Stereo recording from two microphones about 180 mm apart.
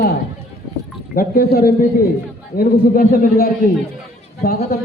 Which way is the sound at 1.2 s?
55° left (ahead or behind).